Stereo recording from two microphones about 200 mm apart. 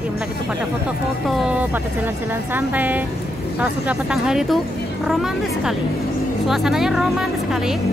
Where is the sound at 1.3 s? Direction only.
5° right (ahead or behind).